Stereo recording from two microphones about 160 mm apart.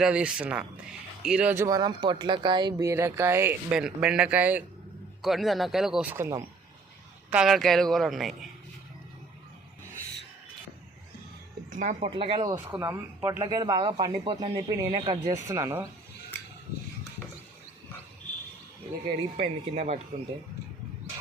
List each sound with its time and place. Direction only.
0.0 s speech: 5° right (ahead or behind)
1.6 s a man's voice: 25° right (ahead or behind)
7.3 s a man's voice: 5° right (ahead or behind)
11.7 s speech: 55° right (ahead or behind)
11.9 s speech: 35° right (ahead or behind)
12.5 s speech: 15° right (ahead or behind)
19.4 s speech: 45° right (ahead or behind)